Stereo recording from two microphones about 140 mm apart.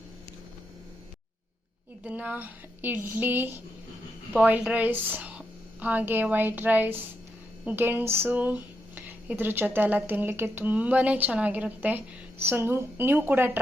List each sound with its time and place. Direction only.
2.0 s a woman's voice: 10° right (ahead or behind)